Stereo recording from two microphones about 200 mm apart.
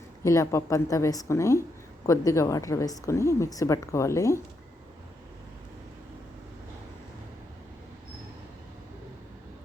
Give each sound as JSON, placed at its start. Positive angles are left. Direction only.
{"t": 0.3, "sound": "a woman's voice", "side_deg": 15}